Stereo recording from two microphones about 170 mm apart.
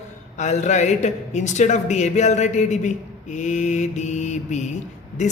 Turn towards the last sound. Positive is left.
turn(degrees=45)  # may be behind; listen again after turning